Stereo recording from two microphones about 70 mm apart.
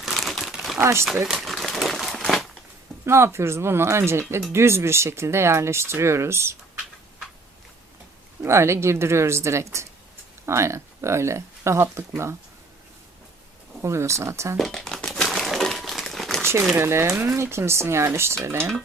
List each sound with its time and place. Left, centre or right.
0.0 s crumpling: centre
0.8 s speech: right
1.3 s crumpling: centre
3.1 s speech: right
8.4 s speech: right
13.8 s speech: right
14.6 s crumpling: centre
16.4 s a sound: right
16.7 s speech: right